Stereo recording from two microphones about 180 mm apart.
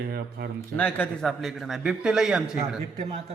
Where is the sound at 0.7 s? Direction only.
10° left (ahead or behind).